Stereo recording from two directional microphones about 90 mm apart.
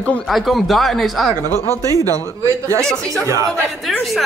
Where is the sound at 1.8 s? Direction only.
40° right (ahead or behind).